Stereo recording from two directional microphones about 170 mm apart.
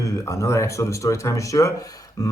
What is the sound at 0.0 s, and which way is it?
Speech, 20° left (ahead or behind).